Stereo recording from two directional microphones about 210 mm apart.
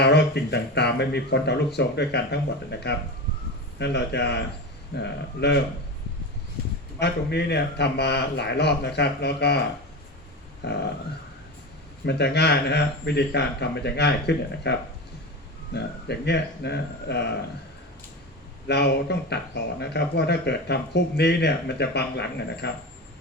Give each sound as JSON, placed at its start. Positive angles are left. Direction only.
{"t": 0.0, "sound": "speech", "side_deg": 50}
{"t": 7.0, "sound": "speech", "side_deg": 50}
{"t": 10.6, "sound": "speech", "side_deg": 55}
{"t": 12.0, "sound": "speech", "side_deg": 50}
{"t": 18.7, "sound": "speech", "side_deg": 50}